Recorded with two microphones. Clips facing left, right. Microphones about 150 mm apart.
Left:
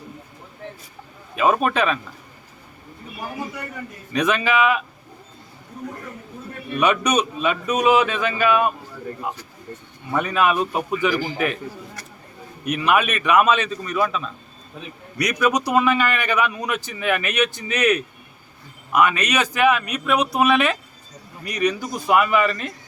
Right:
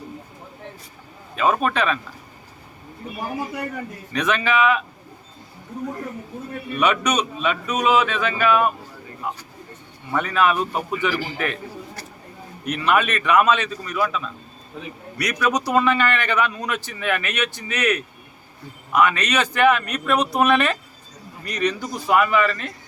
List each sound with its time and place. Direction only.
1.4 s speech: 15° left (ahead or behind)
4.1 s speech: 15° left (ahead or behind)
6.7 s speech: 15° left (ahead or behind)
10.1 s speech: 15° left (ahead or behind)
12.6 s speech: 15° left (ahead or behind)
15.2 s speech: 20° left (ahead or behind)